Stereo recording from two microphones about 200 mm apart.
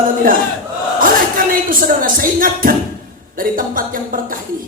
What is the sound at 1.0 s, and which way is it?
A woman's voice, 45° right (ahead or behind).